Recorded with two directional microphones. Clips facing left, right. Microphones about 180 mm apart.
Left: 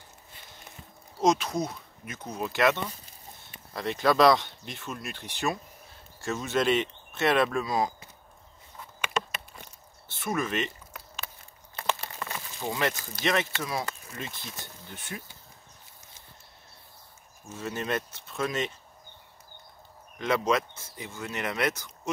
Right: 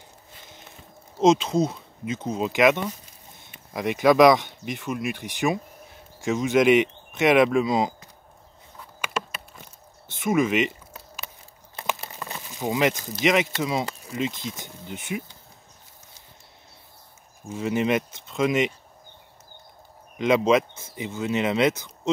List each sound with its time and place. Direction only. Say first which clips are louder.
1.2 s speech: right 6 dB; 25° right (ahead or behind)
9.1 s a sound: right 1 dB; 5° right (ahead or behind)
10.0 s speech: right 8 dB; 15° right (ahead or behind)
11.8 s a sound: right 1 dB; 15° right (ahead or behind)
13.6 s speech: right 6 dB; 20° right (ahead or behind)
17.5 s speech: right 8 dB; 15° right (ahead or behind)
20.2 s speech: right 7 dB; 20° right (ahead or behind)